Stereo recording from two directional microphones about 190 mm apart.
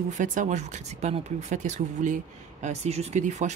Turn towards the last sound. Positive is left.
turn(degrees=-40)  # may be behind; listen again after turning